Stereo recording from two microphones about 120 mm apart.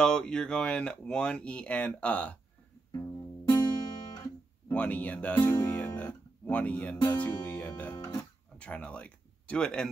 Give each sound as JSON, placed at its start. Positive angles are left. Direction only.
{"t": 0.0, "sound": "speech", "side_deg": 5}
{"t": 2.9, "sound": "music", "side_deg": 25}
{"t": 4.7, "sound": "speech", "side_deg": 10}
{"t": 8.0, "sound": "speech", "side_deg": 30}
{"t": 8.5, "sound": "speech", "side_deg": 10}